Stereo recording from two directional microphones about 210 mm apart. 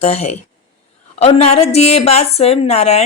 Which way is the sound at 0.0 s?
30° left (ahead or behind).